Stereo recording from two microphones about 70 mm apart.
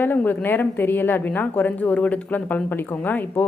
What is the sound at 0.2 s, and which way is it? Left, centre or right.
A woman's voice, left.